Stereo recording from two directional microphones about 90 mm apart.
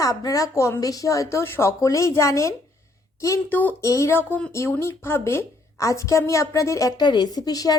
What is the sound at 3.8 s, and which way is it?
A woman's voice, 35° left (ahead or behind).